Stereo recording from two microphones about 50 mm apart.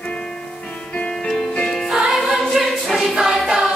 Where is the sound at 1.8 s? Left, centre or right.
Centre.